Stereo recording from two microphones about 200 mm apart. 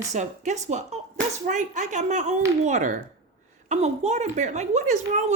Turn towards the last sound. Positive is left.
turn(degrees=-35)  # may be behind; listen again after turning